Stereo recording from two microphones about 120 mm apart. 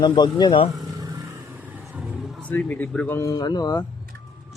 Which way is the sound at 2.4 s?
10° left (ahead or behind).